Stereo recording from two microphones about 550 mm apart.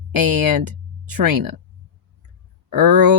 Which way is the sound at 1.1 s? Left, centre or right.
Right.